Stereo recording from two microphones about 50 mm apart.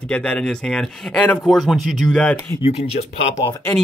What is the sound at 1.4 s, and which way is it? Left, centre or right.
Speech, centre.